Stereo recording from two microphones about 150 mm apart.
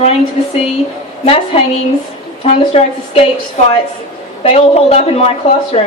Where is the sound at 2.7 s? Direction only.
40° left (ahead or behind).